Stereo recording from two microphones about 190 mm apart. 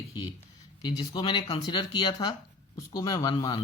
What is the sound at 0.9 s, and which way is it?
Speech, 20° left (ahead or behind).